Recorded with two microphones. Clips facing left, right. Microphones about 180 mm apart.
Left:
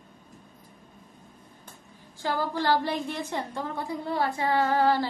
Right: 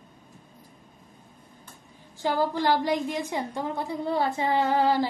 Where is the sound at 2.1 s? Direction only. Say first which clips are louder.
Right 3 dB; 15° right (ahead or behind).